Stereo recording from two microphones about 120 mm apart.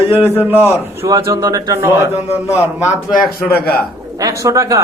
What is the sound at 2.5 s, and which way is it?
Speech, 25° left (ahead or behind).